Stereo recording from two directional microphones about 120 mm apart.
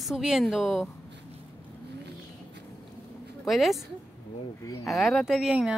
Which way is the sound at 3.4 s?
Centre (ahead or behind).